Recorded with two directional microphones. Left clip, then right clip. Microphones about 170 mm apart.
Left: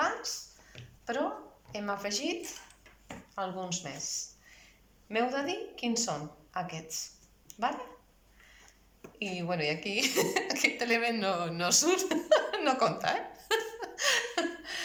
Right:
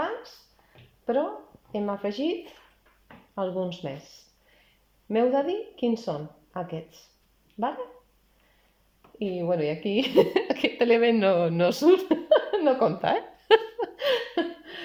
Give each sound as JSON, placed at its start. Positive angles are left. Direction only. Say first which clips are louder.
{"t": 1.1, "sound": "a woman's voice", "louder": "right 6 dB", "side_deg": -45}
{"t": 9.1, "sound": "a woman's voice", "louder": "right 7 dB", "side_deg": -40}